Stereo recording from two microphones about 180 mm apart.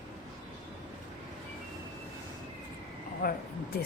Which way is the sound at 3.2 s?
55° left (ahead or behind).